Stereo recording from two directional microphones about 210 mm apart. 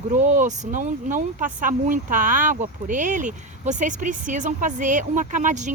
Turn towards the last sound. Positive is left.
turn(degrees=-35)  # may be behind; listen again after turning